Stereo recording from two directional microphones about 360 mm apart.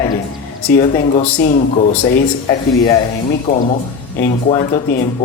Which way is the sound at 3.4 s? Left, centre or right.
Centre.